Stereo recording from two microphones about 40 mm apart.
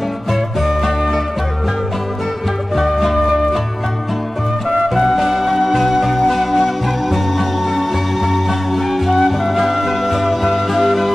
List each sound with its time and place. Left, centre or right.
0.7 s music: centre
2.8 s music: centre
4.6 s music: centre